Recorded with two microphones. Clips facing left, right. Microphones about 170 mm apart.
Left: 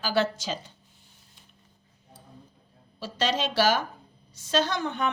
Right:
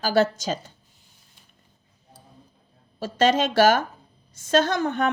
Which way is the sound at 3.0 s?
50° right (ahead or behind).